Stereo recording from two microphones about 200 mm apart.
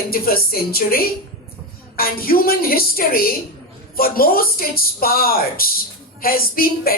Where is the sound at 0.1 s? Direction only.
50° left (ahead or behind).